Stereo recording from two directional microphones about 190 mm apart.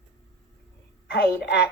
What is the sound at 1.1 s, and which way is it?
Speech, 60° left (ahead or behind).